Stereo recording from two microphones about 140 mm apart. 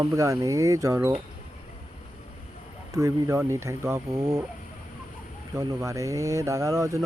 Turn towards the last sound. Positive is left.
turn(degrees=-20)  # may be behind; listen again after turning